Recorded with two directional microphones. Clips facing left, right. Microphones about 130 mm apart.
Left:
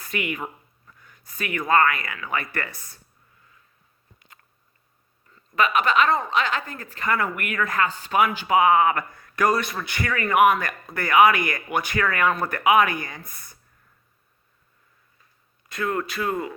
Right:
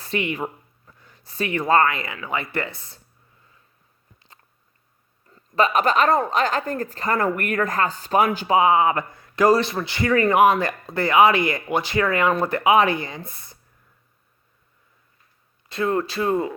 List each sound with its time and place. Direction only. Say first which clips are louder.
0.0 s speech: right 4 dB; 30° right (ahead or behind)
5.3 s speech: right 2 dB; 35° right (ahead or behind)
15.7 s speech: right 4 dB; 25° right (ahead or behind)